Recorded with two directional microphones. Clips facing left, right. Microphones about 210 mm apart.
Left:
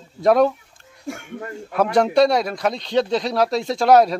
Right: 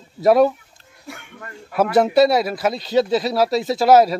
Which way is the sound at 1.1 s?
45° left (ahead or behind).